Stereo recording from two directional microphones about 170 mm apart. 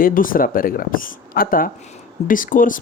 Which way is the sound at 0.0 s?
55° left (ahead or behind).